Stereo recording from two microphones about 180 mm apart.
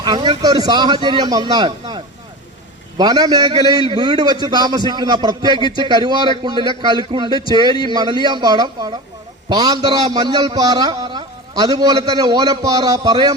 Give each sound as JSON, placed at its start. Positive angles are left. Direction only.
{"t": 0.0, "sound": "a man's voice", "side_deg": -25}
{"t": 3.0, "sound": "a man's voice", "side_deg": -20}